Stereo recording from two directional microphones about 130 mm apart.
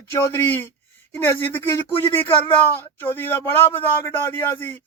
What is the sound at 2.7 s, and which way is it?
Speech, 15° left (ahead or behind).